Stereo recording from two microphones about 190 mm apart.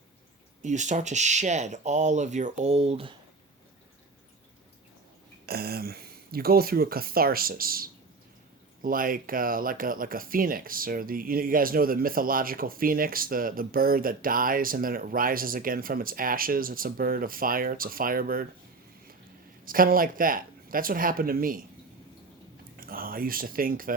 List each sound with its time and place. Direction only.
0.6 s speech: 40° right (ahead or behind)
5.5 s speech: 55° right (ahead or behind)
19.6 s speech: 50° right (ahead or behind)
22.8 s speech: 50° right (ahead or behind)